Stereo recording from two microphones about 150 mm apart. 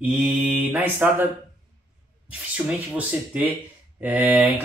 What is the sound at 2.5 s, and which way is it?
Speech, 10° right (ahead or behind).